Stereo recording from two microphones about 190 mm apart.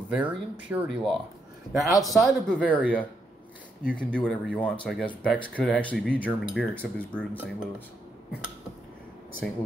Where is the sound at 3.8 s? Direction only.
5° left (ahead or behind).